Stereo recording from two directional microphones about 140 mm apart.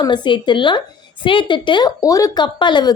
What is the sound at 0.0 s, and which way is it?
A woman's voice, 35° left (ahead or behind).